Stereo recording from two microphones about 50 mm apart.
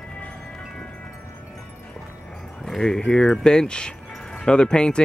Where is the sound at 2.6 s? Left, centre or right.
Centre.